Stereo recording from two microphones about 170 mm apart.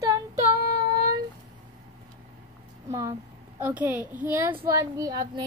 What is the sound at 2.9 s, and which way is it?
A woman's voice, 15° right (ahead or behind).